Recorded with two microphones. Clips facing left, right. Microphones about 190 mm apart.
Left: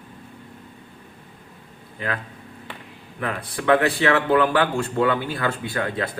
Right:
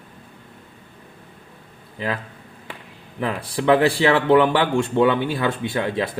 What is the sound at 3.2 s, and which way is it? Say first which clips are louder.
Speech: right 4 dB; 25° right (ahead or behind).